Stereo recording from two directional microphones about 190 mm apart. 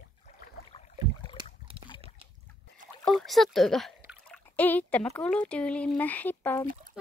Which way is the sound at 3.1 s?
Centre (ahead or behind).